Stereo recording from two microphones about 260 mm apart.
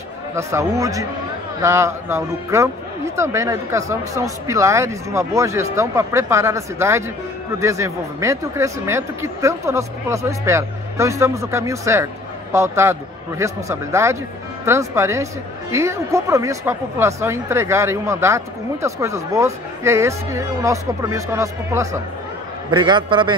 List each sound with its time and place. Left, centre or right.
0.4 s speech: centre